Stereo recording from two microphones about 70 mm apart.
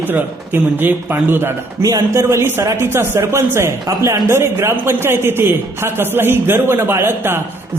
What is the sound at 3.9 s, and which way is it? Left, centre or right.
Speech, right.